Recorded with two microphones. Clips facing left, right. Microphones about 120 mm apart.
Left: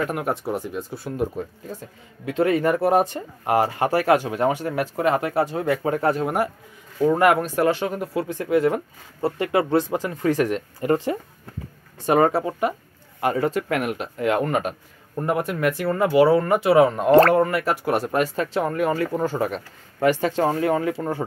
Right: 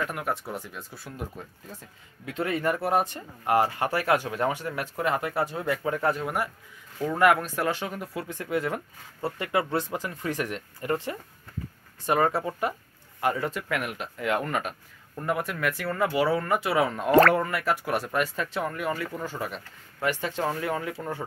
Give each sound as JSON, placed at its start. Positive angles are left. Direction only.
{"t": 0.1, "sound": "speech", "side_deg": 20}
{"t": 0.9, "sound": "speech", "side_deg": 25}
{"t": 2.5, "sound": "speech", "side_deg": 25}
{"t": 5.7, "sound": "speech", "side_deg": 35}
{"t": 12.4, "sound": "speech", "side_deg": 15}
{"t": 13.4, "sound": "speech", "side_deg": 35}
{"t": 17.2, "sound": "speech", "side_deg": 40}
{"t": 18.8, "sound": "speech", "side_deg": 45}